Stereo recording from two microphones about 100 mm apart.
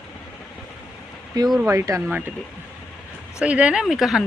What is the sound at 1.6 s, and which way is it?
Speech, 30° right (ahead or behind).